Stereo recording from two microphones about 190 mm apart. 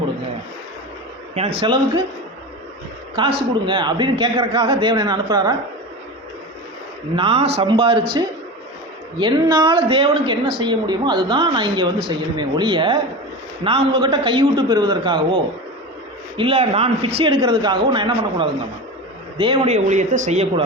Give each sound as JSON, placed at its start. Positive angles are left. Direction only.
{"t": 1.5, "sound": "speech", "side_deg": -25}
{"t": 3.2, "sound": "speech", "side_deg": -25}
{"t": 7.2, "sound": "speech", "side_deg": -30}
{"t": 9.1, "sound": "speech", "side_deg": -25}
{"t": 16.4, "sound": "speech", "side_deg": -30}
{"t": 19.6, "sound": "speech", "side_deg": -35}